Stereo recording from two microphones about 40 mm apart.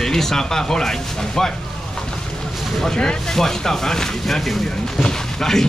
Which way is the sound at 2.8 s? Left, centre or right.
Centre.